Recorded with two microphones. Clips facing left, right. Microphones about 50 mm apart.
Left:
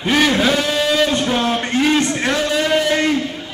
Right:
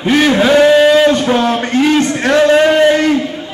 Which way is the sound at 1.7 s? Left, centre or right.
Centre.